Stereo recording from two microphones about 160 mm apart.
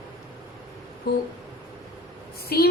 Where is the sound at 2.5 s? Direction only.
75° left (ahead or behind).